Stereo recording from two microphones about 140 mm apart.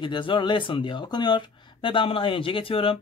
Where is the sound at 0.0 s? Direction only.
35° left (ahead or behind).